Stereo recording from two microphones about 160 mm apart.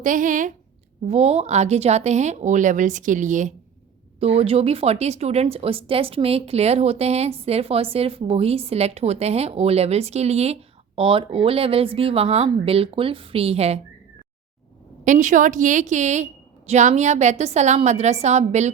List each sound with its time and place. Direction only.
0.0 s a woman's voice: 55° right (ahead or behind)
1.0 s a woman's voice: 40° right (ahead or behind)
4.2 s a woman's voice: 40° right (ahead or behind)
15.0 s a woman's voice: 50° right (ahead or behind)